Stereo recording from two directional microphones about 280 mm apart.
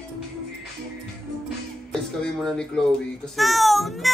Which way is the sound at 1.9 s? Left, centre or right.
Centre.